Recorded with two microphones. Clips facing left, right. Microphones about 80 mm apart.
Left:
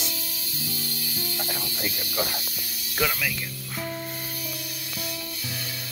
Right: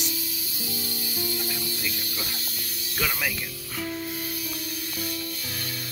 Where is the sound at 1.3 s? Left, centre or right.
Left.